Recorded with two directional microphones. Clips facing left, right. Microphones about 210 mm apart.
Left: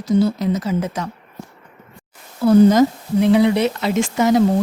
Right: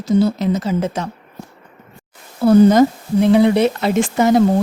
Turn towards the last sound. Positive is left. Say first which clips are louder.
# right 2 dB
turn(degrees=-55)  # may be behind; listen again after turning